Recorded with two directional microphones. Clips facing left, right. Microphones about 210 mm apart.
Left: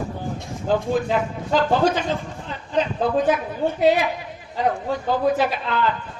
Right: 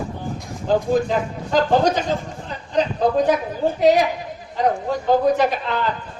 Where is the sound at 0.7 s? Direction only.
40° right (ahead or behind).